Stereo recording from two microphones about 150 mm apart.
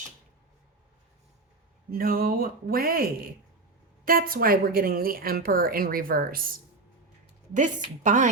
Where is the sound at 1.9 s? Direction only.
80° right.